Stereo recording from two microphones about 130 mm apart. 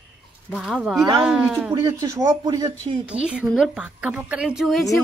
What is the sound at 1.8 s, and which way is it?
Speech, 30° right (ahead or behind).